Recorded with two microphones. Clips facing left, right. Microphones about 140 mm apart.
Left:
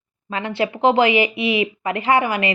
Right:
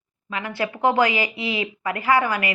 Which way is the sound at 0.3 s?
30° left (ahead or behind).